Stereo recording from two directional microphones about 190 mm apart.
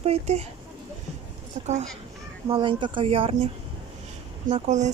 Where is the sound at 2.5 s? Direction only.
25° right (ahead or behind).